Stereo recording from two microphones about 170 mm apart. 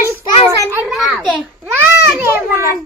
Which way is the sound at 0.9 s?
5° right (ahead or behind).